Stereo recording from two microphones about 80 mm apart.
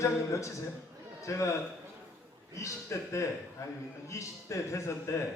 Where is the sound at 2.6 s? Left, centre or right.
Left.